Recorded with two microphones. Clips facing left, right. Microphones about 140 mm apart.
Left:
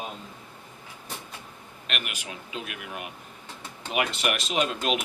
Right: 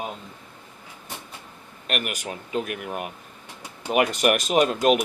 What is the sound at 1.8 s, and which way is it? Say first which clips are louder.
Speech: right 7 dB; 45° right (ahead or behind).